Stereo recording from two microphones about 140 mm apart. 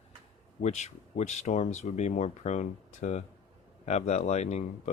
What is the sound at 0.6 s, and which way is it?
Speech, 55° left (ahead or behind).